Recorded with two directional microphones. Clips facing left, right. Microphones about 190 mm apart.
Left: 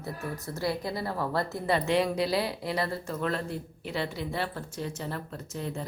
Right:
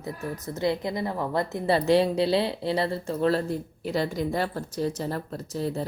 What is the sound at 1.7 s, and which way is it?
Speech, 30° right (ahead or behind).